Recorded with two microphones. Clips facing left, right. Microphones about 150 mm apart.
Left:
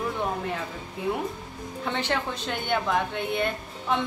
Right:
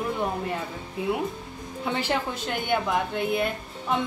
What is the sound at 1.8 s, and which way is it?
A woman's voice, 5° right (ahead or behind).